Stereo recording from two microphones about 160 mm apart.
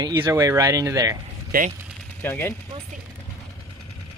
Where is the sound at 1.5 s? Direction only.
60° right (ahead or behind).